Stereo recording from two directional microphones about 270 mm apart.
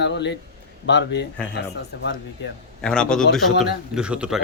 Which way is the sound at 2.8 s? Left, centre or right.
Centre.